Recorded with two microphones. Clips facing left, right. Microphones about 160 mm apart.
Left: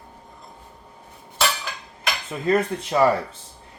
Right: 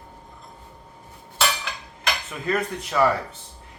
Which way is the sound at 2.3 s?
30° left (ahead or behind).